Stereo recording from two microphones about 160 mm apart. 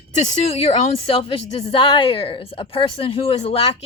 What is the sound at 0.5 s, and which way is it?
Speech, 40° left (ahead or behind).